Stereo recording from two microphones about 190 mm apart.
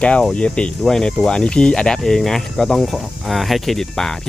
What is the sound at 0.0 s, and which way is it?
Speech, 5° left (ahead or behind).